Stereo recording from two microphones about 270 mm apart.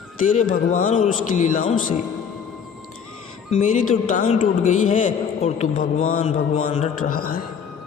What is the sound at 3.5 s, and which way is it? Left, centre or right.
A man's voice, left.